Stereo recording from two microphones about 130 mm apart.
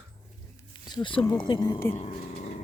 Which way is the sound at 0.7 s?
35° left (ahead or behind).